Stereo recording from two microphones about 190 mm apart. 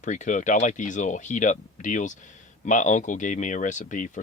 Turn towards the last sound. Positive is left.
turn(degrees=40)  # may be behind; listen again after turning